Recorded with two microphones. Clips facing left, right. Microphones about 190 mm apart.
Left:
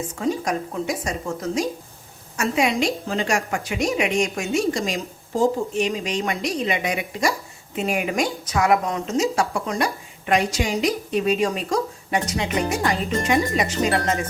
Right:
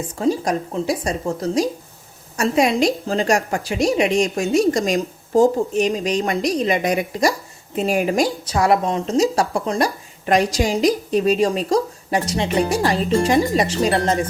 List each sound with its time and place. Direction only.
0.2 s a woman's voice: 35° right (ahead or behind)